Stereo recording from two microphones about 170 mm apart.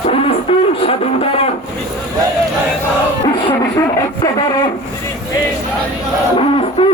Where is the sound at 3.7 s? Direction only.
25° left (ahead or behind).